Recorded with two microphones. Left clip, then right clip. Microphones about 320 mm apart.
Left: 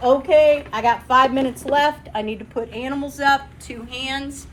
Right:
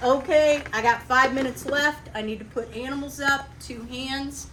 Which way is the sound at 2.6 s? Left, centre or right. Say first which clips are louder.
Left 5 dB; centre.